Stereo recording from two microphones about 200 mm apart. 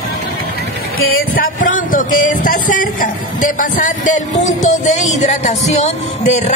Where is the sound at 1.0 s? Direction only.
45° left (ahead or behind).